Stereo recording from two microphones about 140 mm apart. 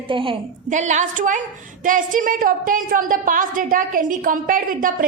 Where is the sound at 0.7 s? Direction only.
60° right (ahead or behind).